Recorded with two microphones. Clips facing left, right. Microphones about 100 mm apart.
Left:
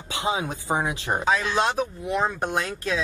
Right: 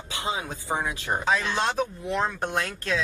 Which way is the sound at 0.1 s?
20° left (ahead or behind).